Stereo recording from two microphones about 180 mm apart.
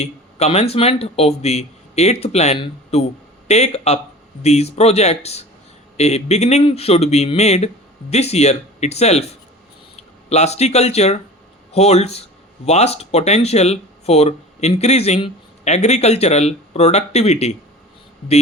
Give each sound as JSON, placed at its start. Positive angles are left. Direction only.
{"t": 0.0, "sound": "speech", "side_deg": 35}
{"t": 10.2, "sound": "speech", "side_deg": 35}